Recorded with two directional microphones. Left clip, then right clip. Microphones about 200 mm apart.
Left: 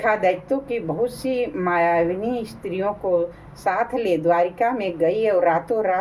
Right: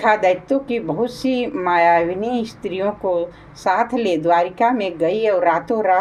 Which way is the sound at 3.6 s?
35° right (ahead or behind).